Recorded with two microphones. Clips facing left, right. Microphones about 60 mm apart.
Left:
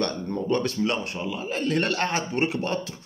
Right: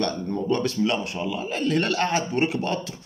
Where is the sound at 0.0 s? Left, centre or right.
Left.